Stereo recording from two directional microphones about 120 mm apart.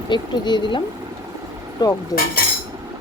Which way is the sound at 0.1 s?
40° left (ahead or behind).